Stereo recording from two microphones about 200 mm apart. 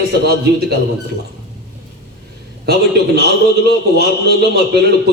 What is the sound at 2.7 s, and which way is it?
A man's voice, 55° right (ahead or behind).